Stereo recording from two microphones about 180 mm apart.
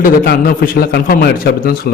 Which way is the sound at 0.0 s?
50° left (ahead or behind).